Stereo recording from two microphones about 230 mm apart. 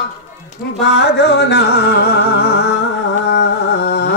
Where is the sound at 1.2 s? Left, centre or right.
Left.